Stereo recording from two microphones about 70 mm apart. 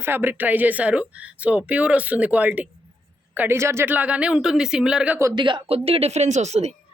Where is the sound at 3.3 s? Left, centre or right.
Right.